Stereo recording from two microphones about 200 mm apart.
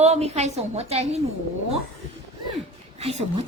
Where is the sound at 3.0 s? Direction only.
30° right (ahead or behind).